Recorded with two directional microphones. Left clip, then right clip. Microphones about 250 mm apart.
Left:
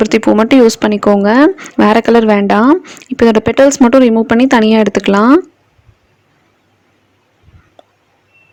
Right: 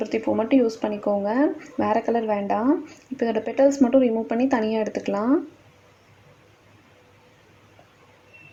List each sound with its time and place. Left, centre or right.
0.0 s speech: left